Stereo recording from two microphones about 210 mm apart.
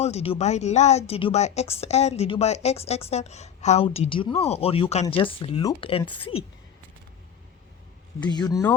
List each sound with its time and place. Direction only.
0.0 s speech: 30° left (ahead or behind)
8.2 s speech: 20° left (ahead or behind)